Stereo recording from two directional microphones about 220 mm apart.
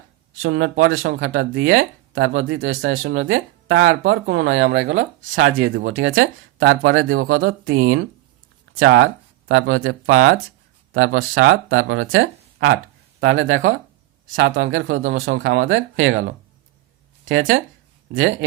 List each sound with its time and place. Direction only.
0.4 s speech: 60° right (ahead or behind)
17.2 s speech: 60° right (ahead or behind)